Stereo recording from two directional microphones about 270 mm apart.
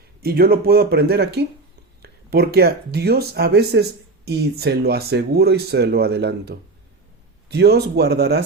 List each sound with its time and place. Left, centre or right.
0.2 s speech: right